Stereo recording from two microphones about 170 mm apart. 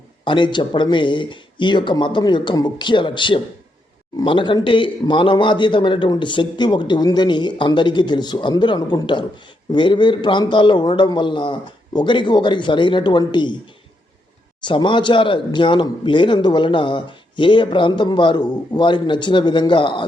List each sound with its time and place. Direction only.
0.3 s a man's voice: 30° left (ahead or behind)
14.6 s a man's voice: 30° left (ahead or behind)